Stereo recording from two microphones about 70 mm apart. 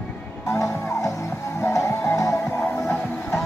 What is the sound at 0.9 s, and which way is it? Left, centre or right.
Music, left.